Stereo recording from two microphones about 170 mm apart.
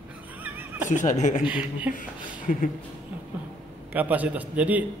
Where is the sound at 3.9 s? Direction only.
10° right (ahead or behind).